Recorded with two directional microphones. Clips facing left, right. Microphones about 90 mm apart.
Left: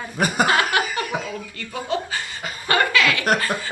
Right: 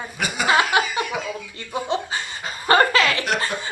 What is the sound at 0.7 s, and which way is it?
Speech, 20° right (ahead or behind).